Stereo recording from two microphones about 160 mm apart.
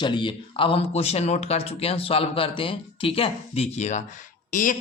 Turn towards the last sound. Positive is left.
turn(degrees=55)  # may be behind; listen again after turning